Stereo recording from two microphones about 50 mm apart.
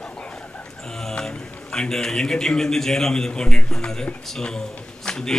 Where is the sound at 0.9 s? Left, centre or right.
Centre.